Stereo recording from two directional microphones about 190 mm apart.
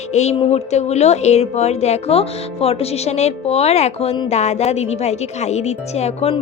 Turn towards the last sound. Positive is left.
turn(degrees=35)  # may be behind; listen again after turning